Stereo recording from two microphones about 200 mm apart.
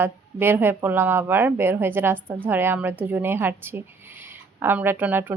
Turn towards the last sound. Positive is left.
turn(degrees=-10)  # may be behind; listen again after turning